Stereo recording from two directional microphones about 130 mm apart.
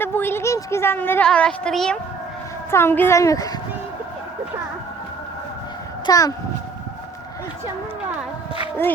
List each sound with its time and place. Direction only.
0.0 s speech: 15° left (ahead or behind)
2.6 s a woman's voice: 20° left (ahead or behind)
6.1 s a woman's voice: 30° left (ahead or behind)